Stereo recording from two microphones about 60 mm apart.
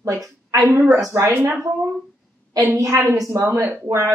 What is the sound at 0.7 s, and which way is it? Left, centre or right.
Speech, right.